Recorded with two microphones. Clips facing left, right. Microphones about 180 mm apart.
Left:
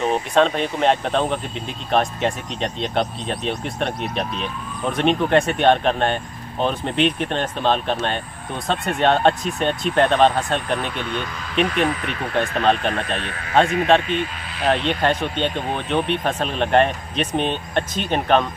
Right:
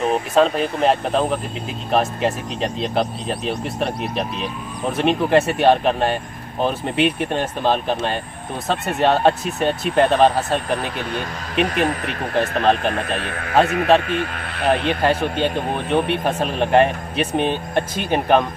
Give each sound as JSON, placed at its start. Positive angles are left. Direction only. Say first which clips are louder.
{"t": 0.0, "sound": "speech", "louder": "right 1 dB", "side_deg": -5}
{"t": 10.8, "sound": "speech", "louder": "right 1 dB", "side_deg": -40}
{"t": 12.4, "sound": "speech", "louder": "right 1 dB", "side_deg": -5}
{"t": 13.2, "sound": "speech", "louder": "right 1 dB", "side_deg": -55}
{"t": 14.9, "sound": "speech", "louder": "right 2 dB", "side_deg": -5}